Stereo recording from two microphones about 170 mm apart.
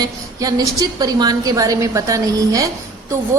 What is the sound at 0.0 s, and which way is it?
A woman's voice, 20° right (ahead or behind).